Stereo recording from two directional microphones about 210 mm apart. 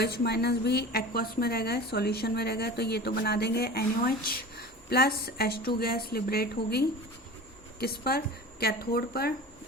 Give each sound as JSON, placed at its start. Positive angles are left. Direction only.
{"t": 0.0, "sound": "a woman's voice", "side_deg": 50}